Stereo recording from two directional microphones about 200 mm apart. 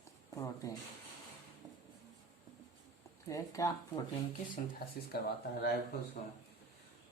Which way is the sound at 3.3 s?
15° left (ahead or behind).